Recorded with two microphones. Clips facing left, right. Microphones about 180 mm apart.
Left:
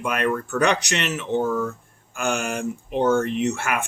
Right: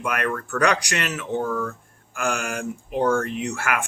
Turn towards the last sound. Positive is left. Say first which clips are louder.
# left 3 dB
turn(degrees=25)  # may be behind; listen again after turning